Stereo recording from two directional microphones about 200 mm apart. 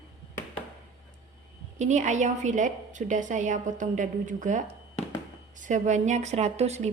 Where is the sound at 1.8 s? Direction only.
35° right (ahead or behind).